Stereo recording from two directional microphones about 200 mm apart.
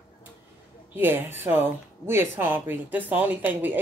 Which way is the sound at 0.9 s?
10° right (ahead or behind).